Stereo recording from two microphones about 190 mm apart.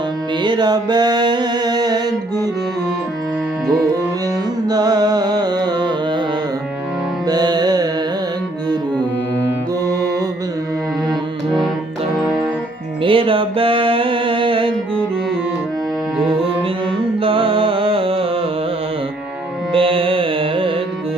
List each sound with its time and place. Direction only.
0.4 s music: 25° right (ahead or behind)
4.6 s music: 20° right (ahead or behind)
7.3 s music: 20° right (ahead or behind)
9.8 s music: 20° right (ahead or behind)
12.1 s music: centre (ahead or behind)
13.0 s music: 30° right (ahead or behind)
17.2 s music: 30° right (ahead or behind)
19.7 s carnatic music: 30° right (ahead or behind)